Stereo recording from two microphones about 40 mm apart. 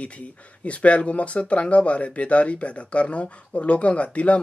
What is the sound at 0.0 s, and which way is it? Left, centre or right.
Speech, left.